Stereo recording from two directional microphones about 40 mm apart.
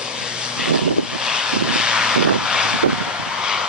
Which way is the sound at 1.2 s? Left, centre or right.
Centre.